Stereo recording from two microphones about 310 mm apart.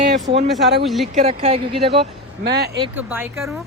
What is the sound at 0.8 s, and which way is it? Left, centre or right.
Speech, centre.